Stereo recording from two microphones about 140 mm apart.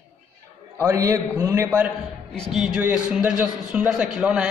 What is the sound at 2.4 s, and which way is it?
A man's voice, 5° right (ahead or behind).